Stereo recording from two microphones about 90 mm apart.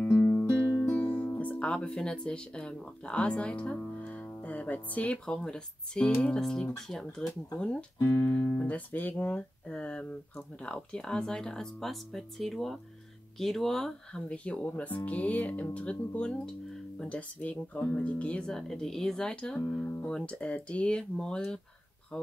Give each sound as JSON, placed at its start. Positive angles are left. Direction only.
{"t": 0.0, "sound": "music", "side_deg": 20}
{"t": 0.7, "sound": "speech", "side_deg": 20}
{"t": 8.0, "sound": "speech", "side_deg": 30}
{"t": 8.3, "sound": "speech", "side_deg": 20}